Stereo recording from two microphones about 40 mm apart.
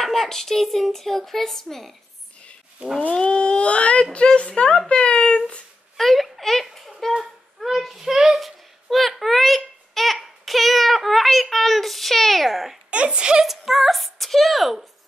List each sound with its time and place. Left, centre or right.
0.0 s speech: centre
3.2 s speech: left
5.9 s a child's voice: centre
12.9 s a woman's voice: right
13.4 s speech: centre